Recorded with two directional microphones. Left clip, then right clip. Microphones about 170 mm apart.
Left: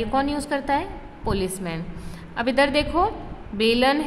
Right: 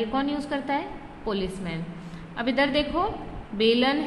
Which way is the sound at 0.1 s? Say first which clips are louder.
Left 4 dB; 25° left (ahead or behind).